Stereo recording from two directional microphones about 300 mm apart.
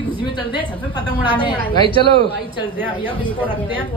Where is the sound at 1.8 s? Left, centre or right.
Centre.